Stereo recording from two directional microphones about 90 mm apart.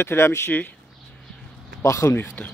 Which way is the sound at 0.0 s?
30° left (ahead or behind).